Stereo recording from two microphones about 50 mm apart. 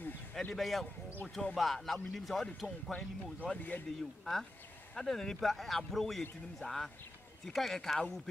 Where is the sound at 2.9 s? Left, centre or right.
Left.